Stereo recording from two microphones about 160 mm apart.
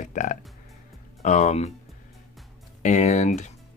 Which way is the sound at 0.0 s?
50° left (ahead or behind).